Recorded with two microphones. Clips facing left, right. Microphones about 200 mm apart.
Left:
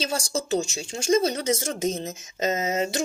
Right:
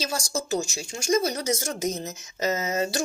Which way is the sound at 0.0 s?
30° left (ahead or behind).